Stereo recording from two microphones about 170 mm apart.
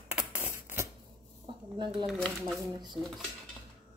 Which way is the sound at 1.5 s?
30° right (ahead or behind).